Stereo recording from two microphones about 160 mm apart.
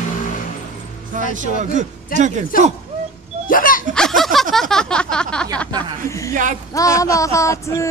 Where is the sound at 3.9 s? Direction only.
Centre (ahead or behind).